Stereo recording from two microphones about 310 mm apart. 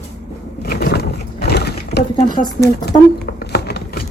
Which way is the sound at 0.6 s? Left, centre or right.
Left.